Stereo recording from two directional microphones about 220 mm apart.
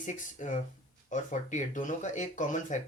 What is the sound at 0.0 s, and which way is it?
Speech, 35° left (ahead or behind).